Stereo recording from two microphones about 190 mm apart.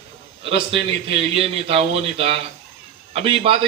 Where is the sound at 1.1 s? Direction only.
30° right (ahead or behind).